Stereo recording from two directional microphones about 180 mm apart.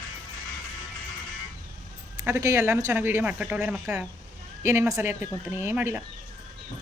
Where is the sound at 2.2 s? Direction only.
15° right (ahead or behind).